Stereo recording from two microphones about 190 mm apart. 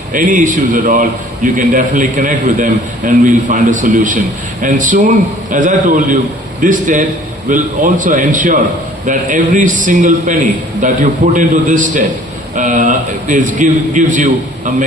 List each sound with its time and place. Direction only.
0.1 s a man's voice: 45° right (ahead or behind)